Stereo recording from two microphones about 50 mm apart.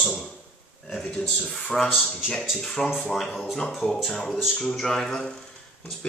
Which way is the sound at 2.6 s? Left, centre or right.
Centre.